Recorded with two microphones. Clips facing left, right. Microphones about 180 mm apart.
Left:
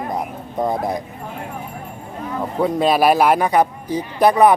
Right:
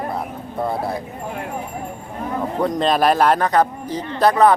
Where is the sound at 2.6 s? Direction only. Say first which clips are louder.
Left 2 dB; 10° left (ahead or behind).